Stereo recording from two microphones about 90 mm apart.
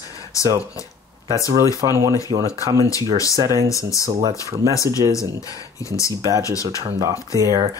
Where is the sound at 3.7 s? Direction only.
35° left (ahead or behind).